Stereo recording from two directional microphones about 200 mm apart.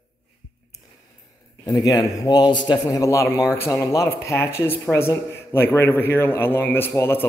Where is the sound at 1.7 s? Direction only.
20° left (ahead or behind).